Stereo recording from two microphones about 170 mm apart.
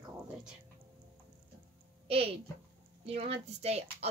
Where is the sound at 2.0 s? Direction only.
35° right (ahead or behind).